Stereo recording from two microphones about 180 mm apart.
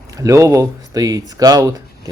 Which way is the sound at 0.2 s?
15° right (ahead or behind).